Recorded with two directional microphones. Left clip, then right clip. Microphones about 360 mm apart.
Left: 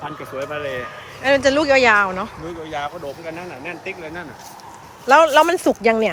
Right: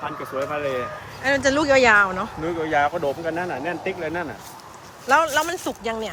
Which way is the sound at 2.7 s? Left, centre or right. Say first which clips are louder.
Right 7 dB; right.